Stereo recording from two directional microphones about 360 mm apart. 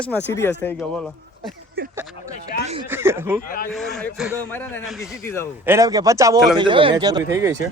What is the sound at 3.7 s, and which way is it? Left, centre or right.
A man's voice, centre.